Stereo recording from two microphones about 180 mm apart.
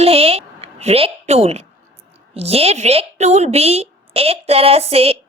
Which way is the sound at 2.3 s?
35° right (ahead or behind).